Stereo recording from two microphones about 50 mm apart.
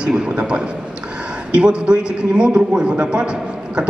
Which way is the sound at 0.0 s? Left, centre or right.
Centre.